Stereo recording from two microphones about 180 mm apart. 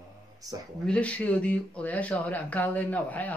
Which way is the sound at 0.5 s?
20° right (ahead or behind).